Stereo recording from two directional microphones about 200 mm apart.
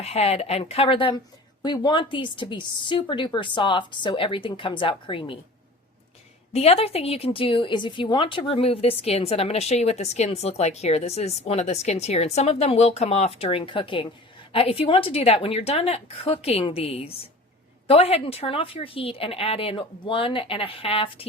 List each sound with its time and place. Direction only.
0.0 s speech: 30° left (ahead or behind)
6.5 s speech: 30° left (ahead or behind)